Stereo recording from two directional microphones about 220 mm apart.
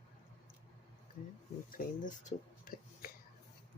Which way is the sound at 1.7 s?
35° left (ahead or behind).